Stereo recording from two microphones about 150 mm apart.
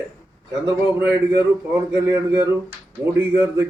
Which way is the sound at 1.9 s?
20° right (ahead or behind).